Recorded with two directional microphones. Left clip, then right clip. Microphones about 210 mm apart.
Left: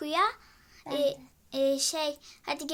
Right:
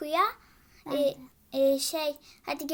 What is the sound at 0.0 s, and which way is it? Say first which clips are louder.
A child's voice: right 1 dB; 5° left (ahead or behind).